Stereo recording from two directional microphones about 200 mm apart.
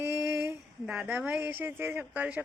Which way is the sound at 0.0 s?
10° right (ahead or behind).